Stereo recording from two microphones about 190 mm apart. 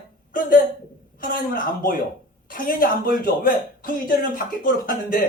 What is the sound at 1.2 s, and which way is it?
Speech, 50° left (ahead or behind).